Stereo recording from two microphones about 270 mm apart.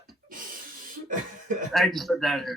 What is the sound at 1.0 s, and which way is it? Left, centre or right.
Cough, right.